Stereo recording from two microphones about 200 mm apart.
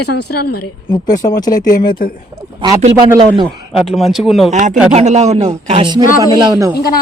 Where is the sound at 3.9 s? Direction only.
Centre (ahead or behind).